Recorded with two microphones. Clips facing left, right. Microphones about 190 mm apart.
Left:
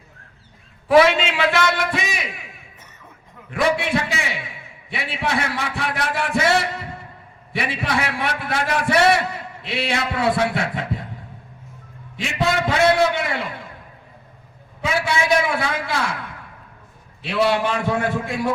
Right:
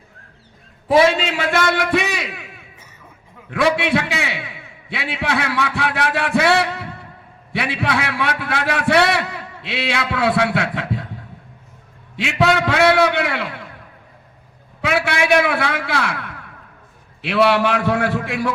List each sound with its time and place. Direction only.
0.9 s a man's voice: 25° right (ahead or behind); by 2.4 s 70° right (ahead or behind)
3.5 s a man's voice: 70° right (ahead or behind)
12.1 s a man's voice: 70° right (ahead or behind)
14.8 s a man's voice: 65° right (ahead or behind)
17.2 s a man's voice: 65° right (ahead or behind)